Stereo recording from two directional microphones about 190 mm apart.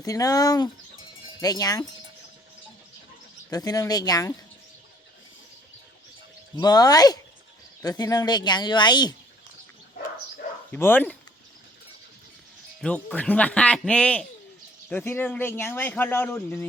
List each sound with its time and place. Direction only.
0.0 s speech: 20° left (ahead or behind)
3.5 s speech: 20° left (ahead or behind)
6.6 s speech: 20° left (ahead or behind)
10.7 s a man's voice: 10° left (ahead or behind)
12.8 s a man's voice: 5° left (ahead or behind)